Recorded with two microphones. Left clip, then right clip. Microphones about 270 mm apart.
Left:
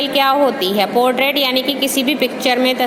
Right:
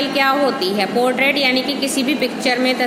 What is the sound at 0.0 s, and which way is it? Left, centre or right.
A woman's voice, left.